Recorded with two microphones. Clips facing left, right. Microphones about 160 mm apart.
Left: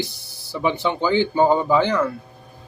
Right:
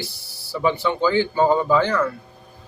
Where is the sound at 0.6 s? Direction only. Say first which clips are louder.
Right 1 dB; 15° left (ahead or behind).